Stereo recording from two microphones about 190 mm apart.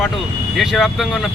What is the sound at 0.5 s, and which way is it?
Speech, centre (ahead or behind).